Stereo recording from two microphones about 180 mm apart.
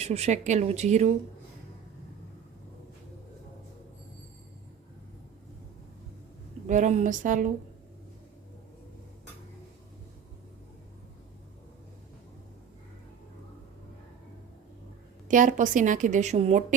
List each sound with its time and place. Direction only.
0.0 s speech: 35° right (ahead or behind)
6.7 s a woman's voice: 45° right (ahead or behind)
15.3 s a woman's voice: 45° right (ahead or behind)